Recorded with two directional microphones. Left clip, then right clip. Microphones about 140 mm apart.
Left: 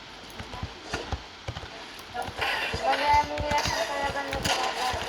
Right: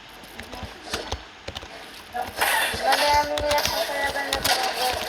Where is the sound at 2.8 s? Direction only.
10° right (ahead or behind).